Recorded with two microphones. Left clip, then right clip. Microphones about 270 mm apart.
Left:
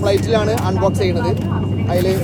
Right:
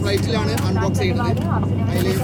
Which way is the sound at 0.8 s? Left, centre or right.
Centre.